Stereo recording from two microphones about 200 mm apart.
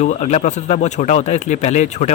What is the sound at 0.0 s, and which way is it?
Speech, 35° left (ahead or behind).